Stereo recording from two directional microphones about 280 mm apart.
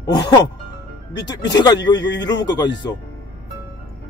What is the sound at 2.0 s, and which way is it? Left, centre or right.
Speech, left.